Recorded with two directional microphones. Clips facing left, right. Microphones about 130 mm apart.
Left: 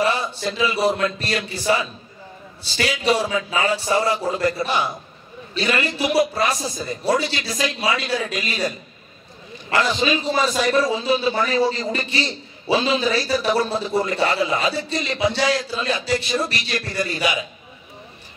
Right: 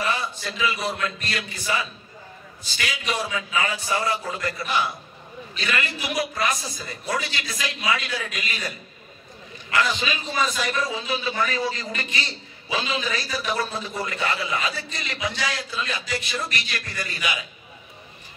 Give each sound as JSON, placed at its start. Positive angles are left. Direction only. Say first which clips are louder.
{"t": 0.0, "sound": "a man's voice", "louder": "left 6 dB", "side_deg": 30}